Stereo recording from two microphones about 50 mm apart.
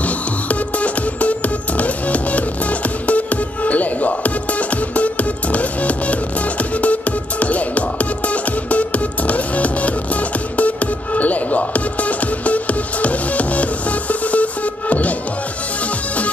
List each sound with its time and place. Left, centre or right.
0.0 s music: left